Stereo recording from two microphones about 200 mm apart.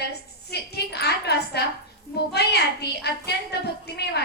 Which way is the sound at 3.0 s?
55° left (ahead or behind).